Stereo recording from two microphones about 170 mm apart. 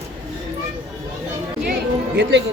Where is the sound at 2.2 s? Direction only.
90° right.